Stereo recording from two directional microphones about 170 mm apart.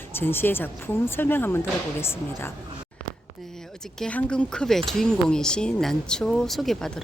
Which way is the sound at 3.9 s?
5° left (ahead or behind).